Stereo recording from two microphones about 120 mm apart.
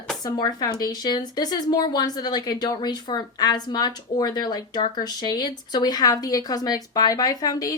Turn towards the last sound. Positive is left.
turn(degrees=30)  # may be behind; listen again after turning